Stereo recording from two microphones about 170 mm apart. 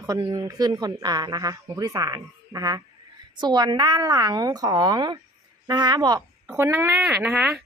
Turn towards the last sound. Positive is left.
turn(degrees=-5)  # may be behind; listen again after turning